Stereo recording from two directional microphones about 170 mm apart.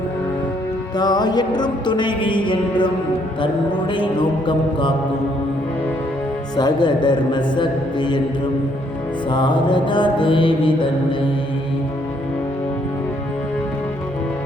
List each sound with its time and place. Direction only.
0.9 s music: 25° left (ahead or behind)
6.6 s music: 25° left (ahead or behind)
9.3 s music: 25° left (ahead or behind)